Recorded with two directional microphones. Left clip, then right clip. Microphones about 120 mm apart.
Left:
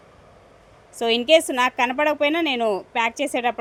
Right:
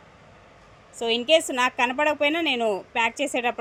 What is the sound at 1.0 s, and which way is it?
A woman's voice, 35° left (ahead or behind).